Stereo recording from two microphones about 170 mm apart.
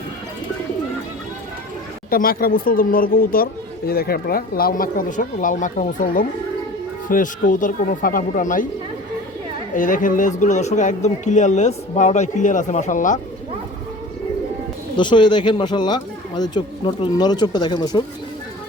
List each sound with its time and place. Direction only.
2.0 s speech: 60° left (ahead or behind)
9.7 s speech: 50° left (ahead or behind)
14.9 s speech: 25° left (ahead or behind)